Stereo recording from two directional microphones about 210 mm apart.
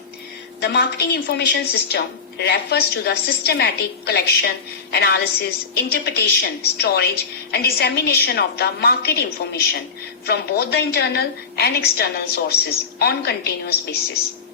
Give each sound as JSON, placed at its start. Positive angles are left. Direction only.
{"t": 0.6, "sound": "a woman's voice", "side_deg": 50}